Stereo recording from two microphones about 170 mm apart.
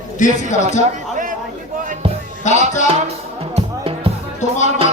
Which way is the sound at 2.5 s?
45° left (ahead or behind).